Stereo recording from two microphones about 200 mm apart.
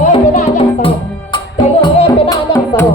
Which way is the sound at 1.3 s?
25° left (ahead or behind).